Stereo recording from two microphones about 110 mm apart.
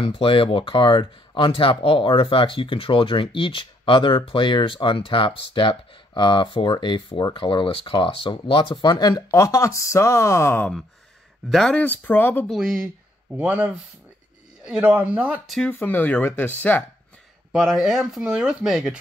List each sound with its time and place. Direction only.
0.2 s speech: 55° left (ahead or behind)
9.3 s speech: 30° left (ahead or behind)
11.5 s speech: 10° left (ahead or behind)
12.4 s speech: centre (ahead or behind)
15.4 s speech: 5° left (ahead or behind)
15.7 s speech: 20° left (ahead or behind)
17.5 s speech: 5° right (ahead or behind)